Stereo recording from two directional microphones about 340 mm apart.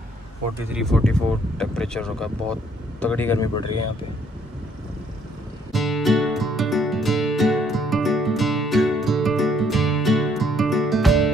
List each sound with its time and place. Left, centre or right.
0.7 s speech: centre
3.6 s speech: left
5.7 s music: centre